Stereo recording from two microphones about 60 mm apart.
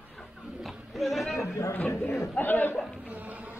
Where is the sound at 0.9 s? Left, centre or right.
Centre.